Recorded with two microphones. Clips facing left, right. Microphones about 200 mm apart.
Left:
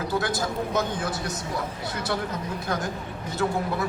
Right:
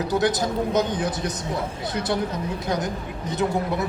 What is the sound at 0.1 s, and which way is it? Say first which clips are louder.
A man's voice: right 6 dB; 20° right (ahead or behind).